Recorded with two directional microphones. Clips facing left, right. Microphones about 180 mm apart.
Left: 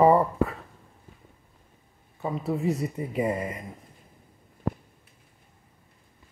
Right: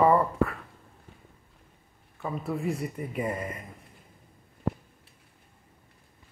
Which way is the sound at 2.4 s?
30° left (ahead or behind).